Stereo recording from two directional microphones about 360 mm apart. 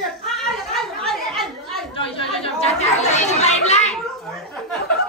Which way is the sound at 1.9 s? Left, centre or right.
Centre.